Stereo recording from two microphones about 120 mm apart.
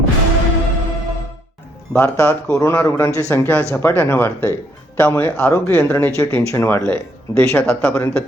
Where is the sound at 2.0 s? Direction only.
20° left (ahead or behind).